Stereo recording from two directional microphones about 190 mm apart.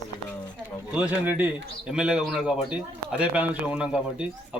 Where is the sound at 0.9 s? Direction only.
10° right (ahead or behind).